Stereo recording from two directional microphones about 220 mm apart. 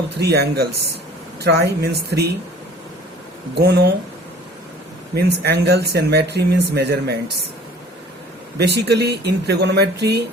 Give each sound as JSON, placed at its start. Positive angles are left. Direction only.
{"t": 0.2, "sound": "speech", "side_deg": -45}
{"t": 3.5, "sound": "speech", "side_deg": -50}
{"t": 5.1, "sound": "speech", "side_deg": -50}
{"t": 8.5, "sound": "speech", "side_deg": -50}